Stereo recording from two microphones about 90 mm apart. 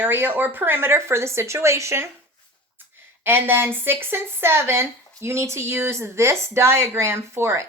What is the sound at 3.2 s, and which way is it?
Speech, 25° right (ahead or behind).